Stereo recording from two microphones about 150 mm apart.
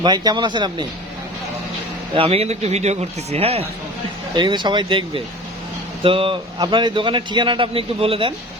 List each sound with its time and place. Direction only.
0.0 s a man's voice: 30° right (ahead or behind)
2.1 s speech: 40° right (ahead or behind)
4.4 s a man's voice: 30° right (ahead or behind)